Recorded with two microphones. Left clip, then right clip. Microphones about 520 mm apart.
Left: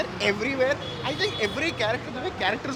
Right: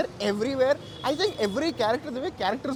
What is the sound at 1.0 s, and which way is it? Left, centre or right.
Speech, right.